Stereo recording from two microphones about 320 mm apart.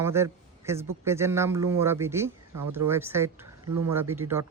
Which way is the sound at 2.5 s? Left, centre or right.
Right.